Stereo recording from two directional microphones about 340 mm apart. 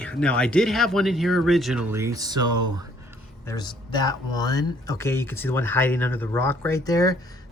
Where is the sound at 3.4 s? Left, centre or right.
Centre.